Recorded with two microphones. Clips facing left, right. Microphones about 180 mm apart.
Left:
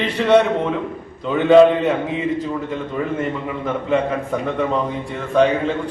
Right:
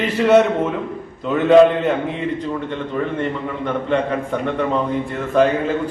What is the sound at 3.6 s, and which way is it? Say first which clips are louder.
A man's voice: even; 5° left (ahead or behind).